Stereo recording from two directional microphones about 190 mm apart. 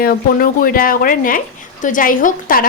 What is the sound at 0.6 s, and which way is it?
A woman's voice, 50° left (ahead or behind).